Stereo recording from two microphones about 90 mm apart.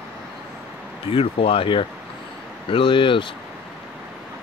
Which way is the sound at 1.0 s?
90° left.